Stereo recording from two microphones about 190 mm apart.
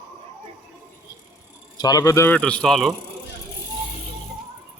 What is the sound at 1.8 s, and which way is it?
A man's voice, 20° left (ahead or behind).